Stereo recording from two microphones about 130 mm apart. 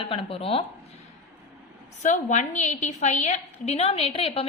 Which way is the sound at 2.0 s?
65° left (ahead or behind).